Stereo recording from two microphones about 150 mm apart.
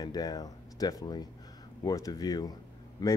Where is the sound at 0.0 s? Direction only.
25° left (ahead or behind).